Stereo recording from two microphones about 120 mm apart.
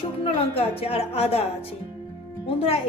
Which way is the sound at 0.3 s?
55° left (ahead or behind).